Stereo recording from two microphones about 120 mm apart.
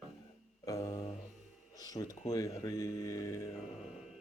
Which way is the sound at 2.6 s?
30° left (ahead or behind).